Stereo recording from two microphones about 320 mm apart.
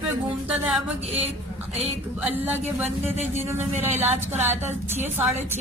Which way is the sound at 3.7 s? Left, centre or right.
Right.